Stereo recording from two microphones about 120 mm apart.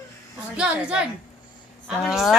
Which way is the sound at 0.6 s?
10° right (ahead or behind).